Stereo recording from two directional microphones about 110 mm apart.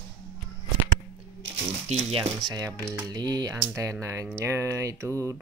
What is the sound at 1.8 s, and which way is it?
Speech, 70° right (ahead or behind).